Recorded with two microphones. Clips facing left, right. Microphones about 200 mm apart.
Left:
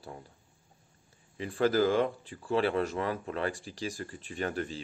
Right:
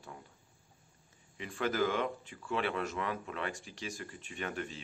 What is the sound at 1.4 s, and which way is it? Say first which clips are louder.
Speech: left 6 dB; 35° left (ahead or behind).